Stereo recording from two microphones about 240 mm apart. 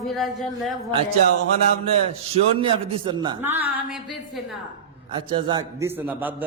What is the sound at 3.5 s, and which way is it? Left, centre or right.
Speech, centre.